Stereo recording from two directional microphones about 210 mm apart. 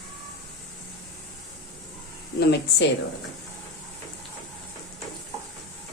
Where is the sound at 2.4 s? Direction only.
50° left (ahead or behind).